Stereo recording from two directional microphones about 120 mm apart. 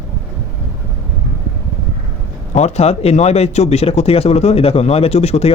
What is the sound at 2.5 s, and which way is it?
Speech, 70° left (ahead or behind).